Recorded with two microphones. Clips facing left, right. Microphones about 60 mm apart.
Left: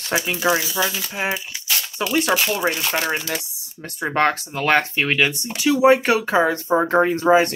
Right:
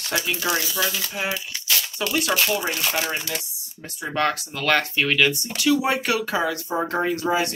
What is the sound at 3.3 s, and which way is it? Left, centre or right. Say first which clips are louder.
Speech: left 4 dB; left.